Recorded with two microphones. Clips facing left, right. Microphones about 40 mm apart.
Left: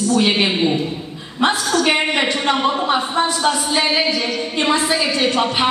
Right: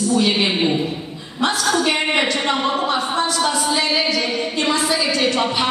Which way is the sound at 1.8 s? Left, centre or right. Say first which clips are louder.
Left 1 dB; left.